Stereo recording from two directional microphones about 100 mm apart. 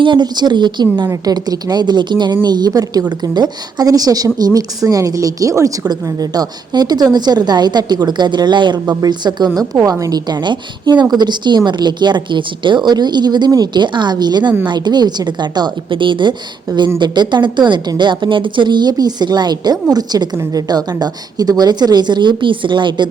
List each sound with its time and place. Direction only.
0.0 s a woman's voice: 50° right (ahead or behind)
1.0 s a woman's voice: 35° right (ahead or behind); by 23.0 s 50° right (ahead or behind)